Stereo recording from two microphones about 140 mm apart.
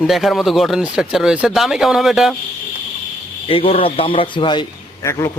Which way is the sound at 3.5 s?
45° left (ahead or behind).